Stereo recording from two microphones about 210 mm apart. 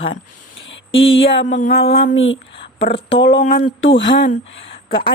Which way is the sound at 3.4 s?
40° left (ahead or behind).